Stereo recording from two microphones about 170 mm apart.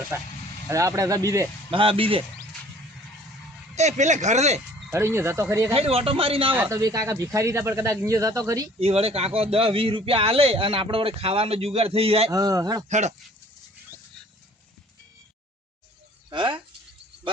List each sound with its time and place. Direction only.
0.7 s speech: 20° right (ahead or behind)
1.7 s a man's voice: 30° right (ahead or behind)
3.8 s speech: 45° right (ahead or behind)
4.9 s speech: 15° right (ahead or behind)
5.7 s a man's voice: 35° right (ahead or behind)
6.5 s speech: 15° right (ahead or behind)
8.8 s a man's voice: 35° right (ahead or behind)
12.3 s speech: 20° right (ahead or behind)
12.9 s speech: 45° right (ahead or behind)
16.3 s speech: 30° right (ahead or behind)